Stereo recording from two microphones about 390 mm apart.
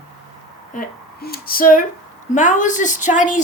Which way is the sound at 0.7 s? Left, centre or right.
Left.